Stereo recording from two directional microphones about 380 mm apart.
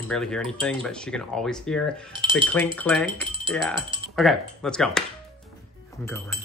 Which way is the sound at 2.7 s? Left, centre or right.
Centre.